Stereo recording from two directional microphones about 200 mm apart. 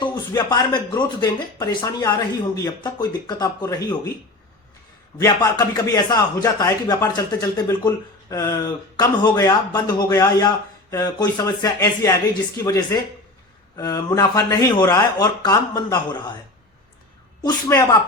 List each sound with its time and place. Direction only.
0.0 s speech: 20° left (ahead or behind)
5.2 s speech: 15° left (ahead or behind)
17.4 s speech: 15° left (ahead or behind)